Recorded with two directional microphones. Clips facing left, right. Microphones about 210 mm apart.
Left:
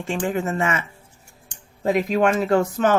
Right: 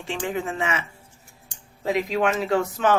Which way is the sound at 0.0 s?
45° left (ahead or behind).